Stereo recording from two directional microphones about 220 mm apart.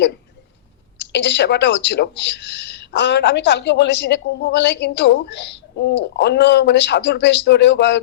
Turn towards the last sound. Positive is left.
turn(degrees=50)  # may be behind; listen again after turning